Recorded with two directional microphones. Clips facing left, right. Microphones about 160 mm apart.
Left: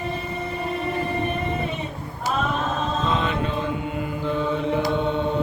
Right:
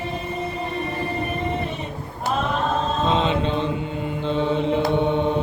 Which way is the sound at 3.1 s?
25° right (ahead or behind).